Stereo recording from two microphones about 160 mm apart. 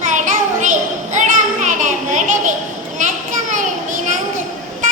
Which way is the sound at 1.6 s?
50° right (ahead or behind).